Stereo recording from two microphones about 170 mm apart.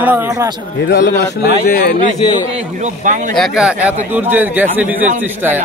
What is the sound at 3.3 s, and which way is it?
Speech, centre (ahead or behind).